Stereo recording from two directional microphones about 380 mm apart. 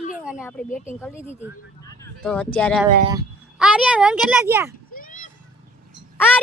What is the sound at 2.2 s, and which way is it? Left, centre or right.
Speech, centre.